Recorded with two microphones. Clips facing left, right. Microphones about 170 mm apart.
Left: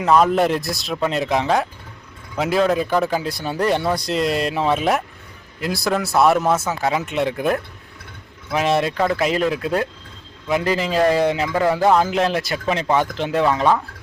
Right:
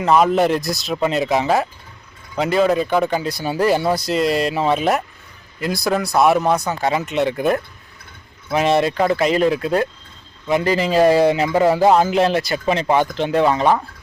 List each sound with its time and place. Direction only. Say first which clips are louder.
0.0 s speech: right 1 dB; centre (ahead or behind)
11.4 s music: right 3 dB; 25° right (ahead or behind)
12.0 s speech: right 3 dB; centre (ahead or behind)